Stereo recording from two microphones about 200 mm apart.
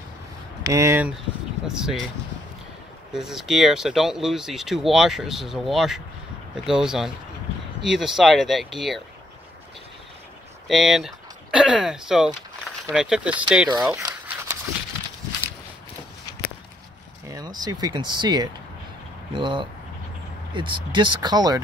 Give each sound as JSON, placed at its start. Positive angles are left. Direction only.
{"t": 0.7, "sound": "speech", "side_deg": -15}
{"t": 3.1, "sound": "speech", "side_deg": 0}
{"t": 10.7, "sound": "speech", "side_deg": 0}
{"t": 13.8, "sound": "a sound", "side_deg": -15}
{"t": 17.3, "sound": "speech", "side_deg": -20}